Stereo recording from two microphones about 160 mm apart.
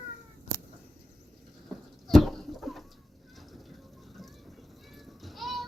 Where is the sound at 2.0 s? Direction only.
Centre (ahead or behind).